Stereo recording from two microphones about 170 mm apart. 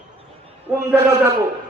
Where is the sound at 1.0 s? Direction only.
20° right (ahead or behind).